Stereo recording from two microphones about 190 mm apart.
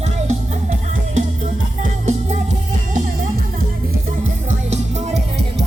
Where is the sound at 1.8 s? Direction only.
40° right (ahead or behind).